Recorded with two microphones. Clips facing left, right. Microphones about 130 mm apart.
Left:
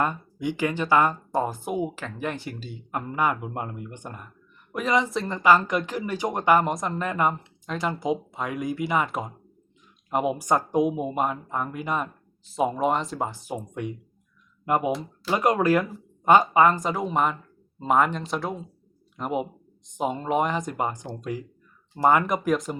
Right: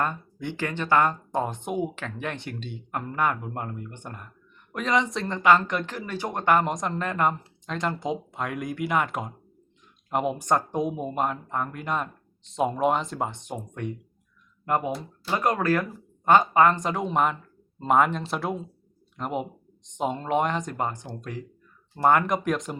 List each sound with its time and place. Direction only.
0.0 s speech: 10° left (ahead or behind)